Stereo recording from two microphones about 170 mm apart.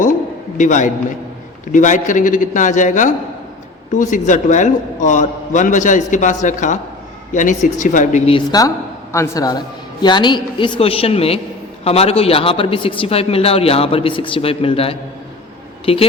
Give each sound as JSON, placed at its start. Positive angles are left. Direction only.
{"t": 0.5, "sound": "a man's voice", "side_deg": 45}
{"t": 9.1, "sound": "a woman's voice", "side_deg": 20}